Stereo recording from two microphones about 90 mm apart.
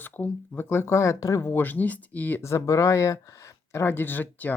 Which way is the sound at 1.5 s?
20° left (ahead or behind).